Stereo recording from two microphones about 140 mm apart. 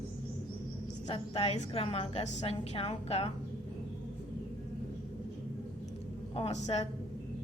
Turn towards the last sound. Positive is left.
turn(degrees=50)  # may be behind; listen again after turning